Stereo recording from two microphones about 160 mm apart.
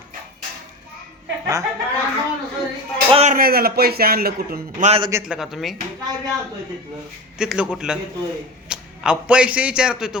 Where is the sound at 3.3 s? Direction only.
70° right (ahead or behind).